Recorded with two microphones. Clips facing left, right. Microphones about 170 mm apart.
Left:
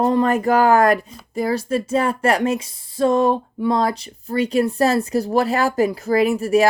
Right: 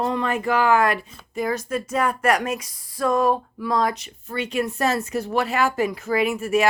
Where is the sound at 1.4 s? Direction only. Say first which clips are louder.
Left 4 dB; 30° left (ahead or behind).